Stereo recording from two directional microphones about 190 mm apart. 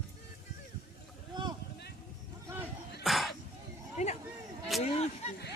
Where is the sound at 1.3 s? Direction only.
20° right (ahead or behind).